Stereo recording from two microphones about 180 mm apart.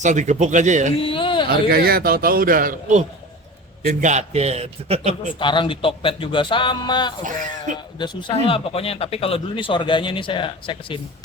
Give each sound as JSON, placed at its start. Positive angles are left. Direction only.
{"t": 0.0, "sound": "a man's voice", "side_deg": -40}
{"t": 0.9, "sound": "a sound", "side_deg": 30}
{"t": 1.5, "sound": "a man's voice", "side_deg": -55}
{"t": 5.4, "sound": "speech", "side_deg": 25}
{"t": 7.3, "sound": "speech", "side_deg": -45}
{"t": 7.9, "sound": "speech", "side_deg": 25}